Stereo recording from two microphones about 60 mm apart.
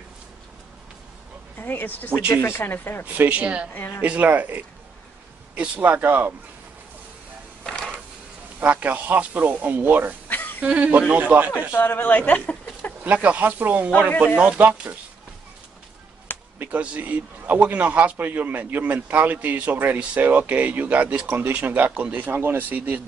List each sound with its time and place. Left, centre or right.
1.6 s speech: left
2.2 s speech: left
3.1 s a man's voice: right
7.6 s a sound: centre
8.5 s a man's voice: right
11.7 s speech: left
13.0 s a man's voice: right
16.5 s a man's voice: right